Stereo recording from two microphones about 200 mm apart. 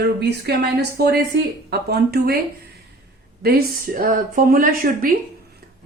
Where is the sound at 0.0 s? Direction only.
55° right (ahead or behind).